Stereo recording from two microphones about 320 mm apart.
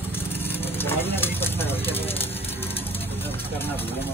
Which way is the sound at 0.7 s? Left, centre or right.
Centre.